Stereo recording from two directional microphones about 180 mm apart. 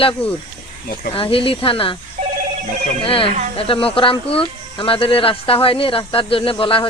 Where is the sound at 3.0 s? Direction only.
30° left (ahead or behind).